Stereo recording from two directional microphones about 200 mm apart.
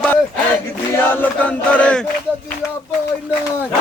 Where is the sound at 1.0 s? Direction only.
10° left (ahead or behind).